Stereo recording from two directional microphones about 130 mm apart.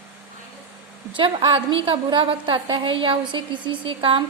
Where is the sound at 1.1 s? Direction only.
40° right (ahead or behind).